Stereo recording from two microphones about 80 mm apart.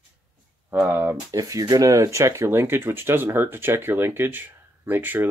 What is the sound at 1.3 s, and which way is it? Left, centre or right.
Speech, right.